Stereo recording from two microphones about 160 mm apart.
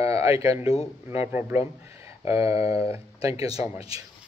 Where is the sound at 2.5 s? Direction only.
35° left (ahead or behind).